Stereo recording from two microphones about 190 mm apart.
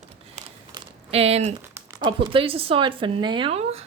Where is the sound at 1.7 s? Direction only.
15° right (ahead or behind); by 3.8 s 30° right (ahead or behind).